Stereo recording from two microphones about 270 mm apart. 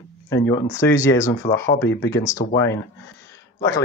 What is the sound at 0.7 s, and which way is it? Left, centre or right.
Speech, centre.